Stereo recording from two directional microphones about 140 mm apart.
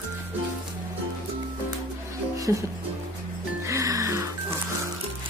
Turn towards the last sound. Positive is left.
turn(degrees=-20)  # may be behind; listen again after turning